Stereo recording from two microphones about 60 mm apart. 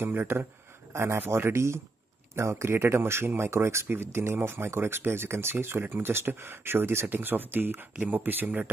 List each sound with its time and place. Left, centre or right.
0.0 s a man's voice: right